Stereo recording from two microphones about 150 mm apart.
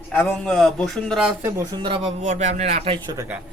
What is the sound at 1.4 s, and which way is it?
Speech, 20° right (ahead or behind).